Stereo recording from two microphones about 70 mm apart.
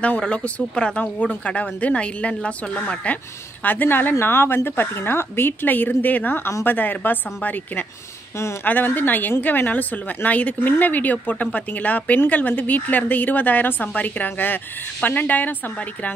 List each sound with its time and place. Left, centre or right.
0.0 s a woman's voice: centre